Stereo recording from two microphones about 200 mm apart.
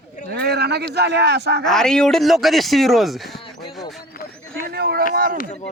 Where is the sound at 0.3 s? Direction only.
50° right (ahead or behind).